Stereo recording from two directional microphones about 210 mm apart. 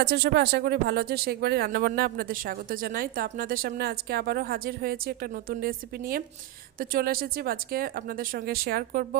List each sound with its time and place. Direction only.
0.0 s speech: 50° right (ahead or behind)